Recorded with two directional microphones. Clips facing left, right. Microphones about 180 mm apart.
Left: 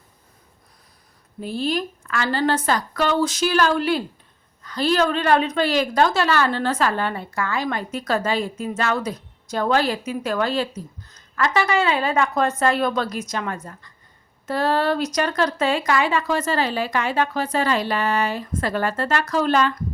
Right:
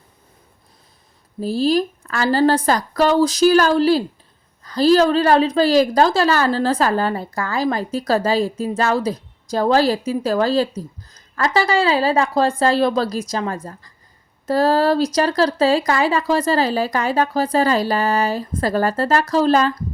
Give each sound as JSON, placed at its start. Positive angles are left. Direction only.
{"t": 1.4, "sound": "a woman's voice", "side_deg": -35}